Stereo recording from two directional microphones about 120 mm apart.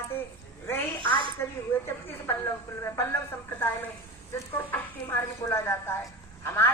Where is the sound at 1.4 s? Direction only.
20° left (ahead or behind).